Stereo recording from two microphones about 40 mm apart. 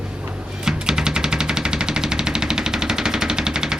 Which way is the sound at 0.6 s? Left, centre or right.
Centre.